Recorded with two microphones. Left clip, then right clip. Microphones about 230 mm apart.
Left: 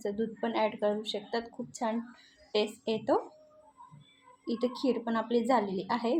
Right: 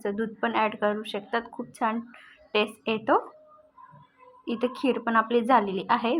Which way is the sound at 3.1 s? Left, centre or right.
Right.